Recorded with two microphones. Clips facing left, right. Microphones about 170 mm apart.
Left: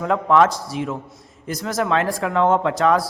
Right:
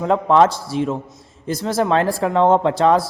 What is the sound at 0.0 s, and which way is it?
A man's voice, 30° right (ahead or behind).